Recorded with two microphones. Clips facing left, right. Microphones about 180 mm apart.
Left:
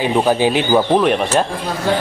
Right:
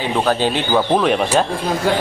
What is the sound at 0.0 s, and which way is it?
Speech, 15° left (ahead or behind).